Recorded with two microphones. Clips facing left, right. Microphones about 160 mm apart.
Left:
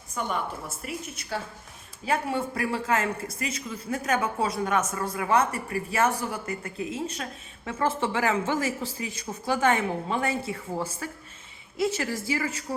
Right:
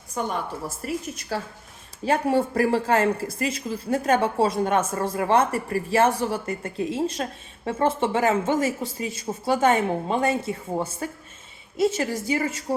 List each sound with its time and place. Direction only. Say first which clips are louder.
0.8 s speech: right 6 dB; 40° right (ahead or behind); by 12.5 s 20° right (ahead or behind)